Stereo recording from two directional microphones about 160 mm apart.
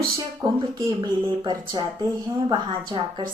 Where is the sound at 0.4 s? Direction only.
20° right (ahead or behind).